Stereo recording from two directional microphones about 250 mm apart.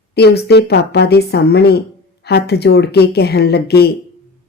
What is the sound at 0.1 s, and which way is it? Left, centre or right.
A woman's voice, left.